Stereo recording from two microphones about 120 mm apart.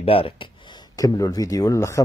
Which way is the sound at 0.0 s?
50° left (ahead or behind).